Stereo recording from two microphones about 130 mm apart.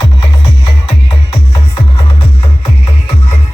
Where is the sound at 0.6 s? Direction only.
35° left (ahead or behind).